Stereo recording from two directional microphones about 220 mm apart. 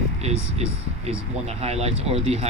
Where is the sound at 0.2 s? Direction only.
30° right (ahead or behind).